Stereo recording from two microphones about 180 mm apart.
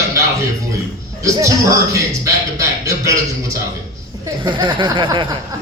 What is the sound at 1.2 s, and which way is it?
A man's voice, 15° right (ahead or behind).